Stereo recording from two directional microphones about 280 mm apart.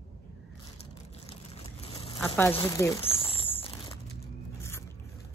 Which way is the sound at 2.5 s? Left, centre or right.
Centre.